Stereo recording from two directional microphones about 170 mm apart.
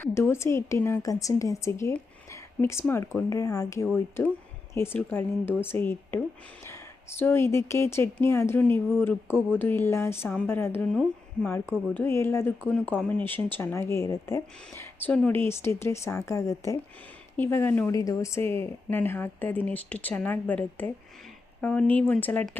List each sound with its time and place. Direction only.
0.0 s speech: 15° left (ahead or behind)